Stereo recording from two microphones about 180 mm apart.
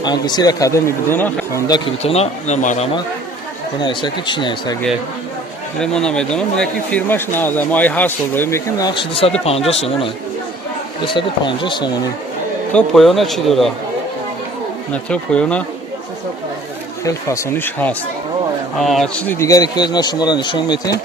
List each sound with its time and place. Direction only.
0.0 s speech: 25° left (ahead or behind)
2.0 s speech: 35° left (ahead or behind)
3.8 s speech: 25° left (ahead or behind)
5.8 s speech: 5° left (ahead or behind)
9.0 s speech: 30° left (ahead or behind)
11.1 s speech: 25° left (ahead or behind)
12.7 s speech: centre (ahead or behind)
14.9 s speech: 5° left (ahead or behind)
17.0 s speech: 15° left (ahead or behind)